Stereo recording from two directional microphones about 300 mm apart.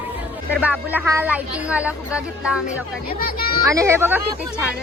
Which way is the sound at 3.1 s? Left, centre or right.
Left.